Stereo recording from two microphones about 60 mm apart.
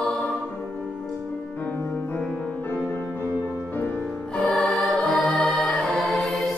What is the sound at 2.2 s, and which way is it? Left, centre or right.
Music, centre.